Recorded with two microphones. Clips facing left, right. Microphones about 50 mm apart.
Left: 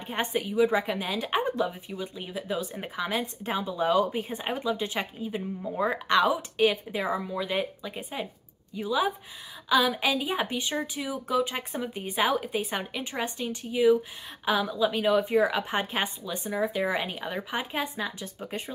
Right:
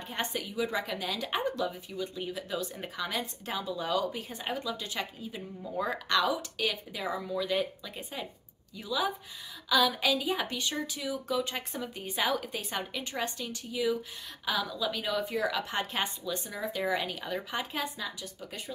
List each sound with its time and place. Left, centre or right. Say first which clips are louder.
0.1 s a woman's voice: left 6 dB; left
17.9 s a woman's voice: left 5 dB; left